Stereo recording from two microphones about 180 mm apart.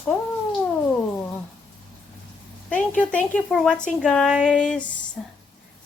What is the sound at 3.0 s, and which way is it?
Speech, 5° left (ahead or behind).